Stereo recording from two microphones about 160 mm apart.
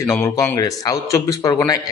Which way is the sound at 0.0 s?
15° left (ahead or behind).